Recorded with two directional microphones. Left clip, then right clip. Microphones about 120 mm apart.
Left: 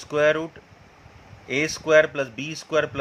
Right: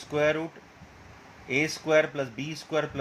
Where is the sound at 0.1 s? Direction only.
40° left (ahead or behind).